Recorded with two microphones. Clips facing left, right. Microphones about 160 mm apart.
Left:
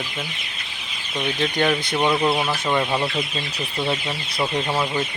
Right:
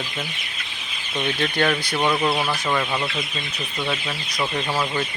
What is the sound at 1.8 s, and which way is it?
Speech, 20° left (ahead or behind).